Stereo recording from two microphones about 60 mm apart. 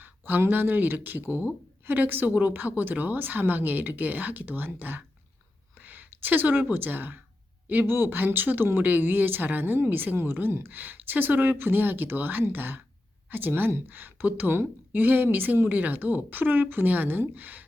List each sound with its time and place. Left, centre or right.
0.0 s a woman's voice: right